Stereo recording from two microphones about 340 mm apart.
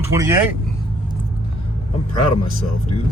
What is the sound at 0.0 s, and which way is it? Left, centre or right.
Speech, centre.